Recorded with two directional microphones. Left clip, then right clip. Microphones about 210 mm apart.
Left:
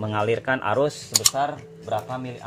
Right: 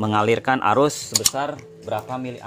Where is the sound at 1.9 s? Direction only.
30° right (ahead or behind).